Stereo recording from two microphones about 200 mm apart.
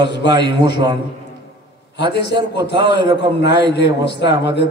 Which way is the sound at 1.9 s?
60° left (ahead or behind).